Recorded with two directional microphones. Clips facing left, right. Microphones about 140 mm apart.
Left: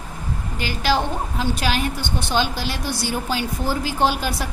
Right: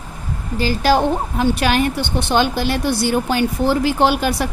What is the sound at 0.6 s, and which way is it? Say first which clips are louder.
A woman's voice: right 6 dB; 40° right (ahead or behind).